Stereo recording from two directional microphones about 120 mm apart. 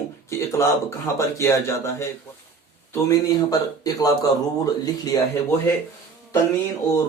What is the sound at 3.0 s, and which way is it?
A man's voice, 30° left (ahead or behind).